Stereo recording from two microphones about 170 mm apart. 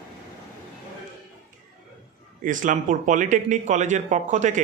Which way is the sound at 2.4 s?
50° right (ahead or behind).